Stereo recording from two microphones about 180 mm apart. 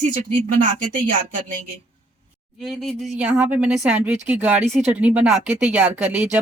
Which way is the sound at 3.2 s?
10° right (ahead or behind).